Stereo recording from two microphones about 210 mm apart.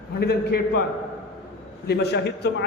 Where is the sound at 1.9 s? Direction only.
50° left (ahead or behind).